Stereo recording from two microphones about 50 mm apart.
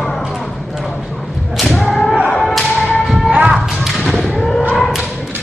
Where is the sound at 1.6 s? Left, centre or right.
Centre.